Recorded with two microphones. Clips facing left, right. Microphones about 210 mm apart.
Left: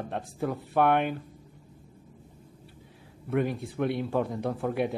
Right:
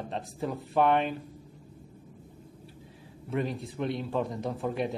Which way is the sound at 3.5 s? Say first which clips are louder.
Left 3 dB; 60° left (ahead or behind).